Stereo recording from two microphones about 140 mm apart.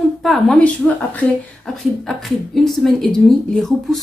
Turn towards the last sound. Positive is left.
turn(degrees=0)  # may be behind; listen again after turning